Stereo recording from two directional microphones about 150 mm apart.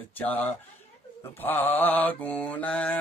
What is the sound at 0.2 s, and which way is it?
Mantra, 10° left (ahead or behind).